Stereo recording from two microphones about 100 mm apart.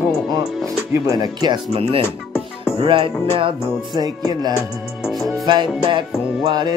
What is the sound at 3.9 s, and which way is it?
Speech, 40° right (ahead or behind).